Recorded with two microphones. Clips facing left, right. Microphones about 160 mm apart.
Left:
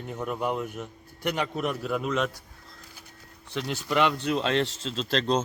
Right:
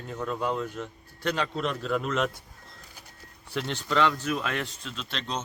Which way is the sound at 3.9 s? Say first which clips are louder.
Left 1 dB; 15° left (ahead or behind).